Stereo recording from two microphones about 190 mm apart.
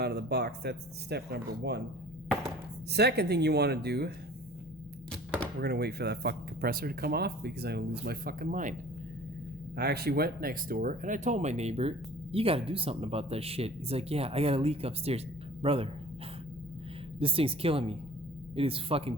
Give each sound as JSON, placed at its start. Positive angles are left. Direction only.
{"t": 0.0, "sound": "speech", "side_deg": -55}
{"t": 2.9, "sound": "speech", "side_deg": -60}
{"t": 5.5, "sound": "speech", "side_deg": -60}
{"t": 9.7, "sound": "a woman's voice", "side_deg": -55}
{"t": 17.2, "sound": "a woman's voice", "side_deg": -30}